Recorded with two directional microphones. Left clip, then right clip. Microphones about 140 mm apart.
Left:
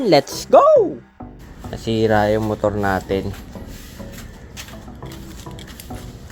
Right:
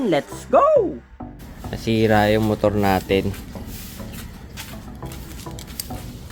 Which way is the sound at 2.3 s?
30° right (ahead or behind).